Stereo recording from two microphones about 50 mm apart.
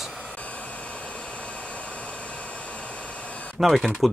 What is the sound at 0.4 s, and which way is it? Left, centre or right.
Hair dryer, left.